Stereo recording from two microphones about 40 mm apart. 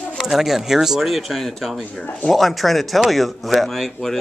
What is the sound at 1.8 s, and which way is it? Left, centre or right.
Speech, centre.